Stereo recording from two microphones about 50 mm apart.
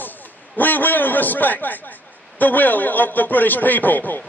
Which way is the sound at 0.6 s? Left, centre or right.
Left.